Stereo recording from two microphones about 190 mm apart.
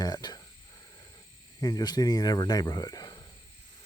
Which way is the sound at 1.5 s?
20° left (ahead or behind).